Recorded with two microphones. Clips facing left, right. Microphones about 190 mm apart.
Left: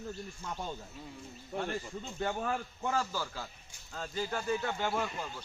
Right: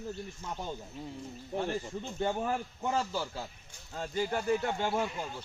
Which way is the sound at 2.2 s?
15° right (ahead or behind).